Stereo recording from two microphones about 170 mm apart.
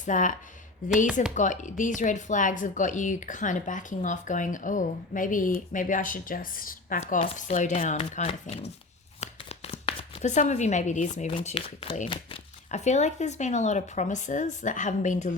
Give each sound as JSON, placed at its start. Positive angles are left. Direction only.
{"t": 0.0, "sound": "speech", "side_deg": 50}
{"t": 9.2, "sound": "a sound", "side_deg": 35}
{"t": 11.3, "sound": "speech", "side_deg": 30}